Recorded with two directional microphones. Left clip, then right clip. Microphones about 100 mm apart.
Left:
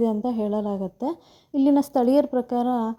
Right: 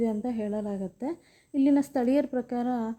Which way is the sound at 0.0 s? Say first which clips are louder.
Left 6 dB; 35° left (ahead or behind).